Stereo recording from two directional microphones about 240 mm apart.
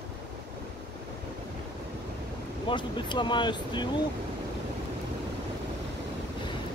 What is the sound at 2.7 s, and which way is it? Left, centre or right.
Speech, centre.